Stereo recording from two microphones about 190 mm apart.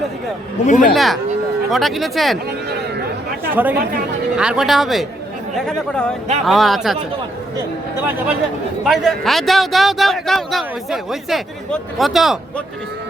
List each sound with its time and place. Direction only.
0.6 s speech: 40° left (ahead or behind)
0.9 s a man's voice: centre (ahead or behind)
3.5 s a man's voice: 10° right (ahead or behind)
8.8 s a man's voice: centre (ahead or behind)